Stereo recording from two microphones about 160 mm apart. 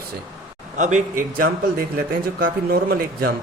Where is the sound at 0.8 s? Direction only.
50° right (ahead or behind); by 3.3 s 65° right (ahead or behind).